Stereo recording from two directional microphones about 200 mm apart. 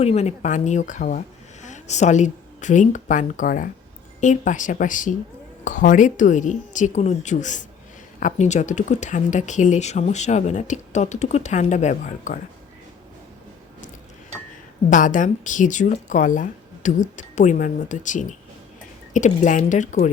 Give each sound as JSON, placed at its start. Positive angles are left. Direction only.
{"t": 0.0, "sound": "a woman's voice", "side_deg": 30}
{"t": 14.8, "sound": "speech", "side_deg": 40}